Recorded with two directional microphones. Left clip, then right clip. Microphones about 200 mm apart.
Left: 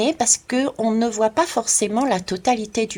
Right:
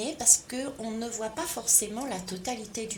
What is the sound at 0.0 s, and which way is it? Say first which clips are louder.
Speech: left 8 dB; 30° left (ahead or behind).